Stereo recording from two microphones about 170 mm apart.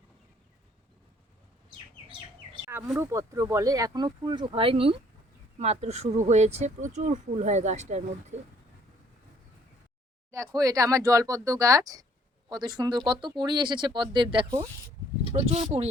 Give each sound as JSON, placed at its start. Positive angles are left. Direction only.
{"t": 2.6, "sound": "a sound", "side_deg": -15}
{"t": 3.0, "sound": "speech", "side_deg": -15}
{"t": 10.3, "sound": "speech", "side_deg": -20}
{"t": 15.3, "sound": "speech", "side_deg": -40}